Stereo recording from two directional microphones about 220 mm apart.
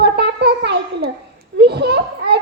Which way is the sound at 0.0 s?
50° right (ahead or behind).